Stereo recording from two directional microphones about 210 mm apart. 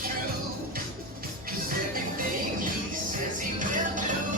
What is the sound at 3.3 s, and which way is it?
Music, 40° right (ahead or behind).